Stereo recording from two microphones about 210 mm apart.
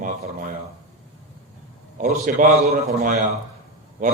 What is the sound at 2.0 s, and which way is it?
A man's voice, 35° right (ahead or behind).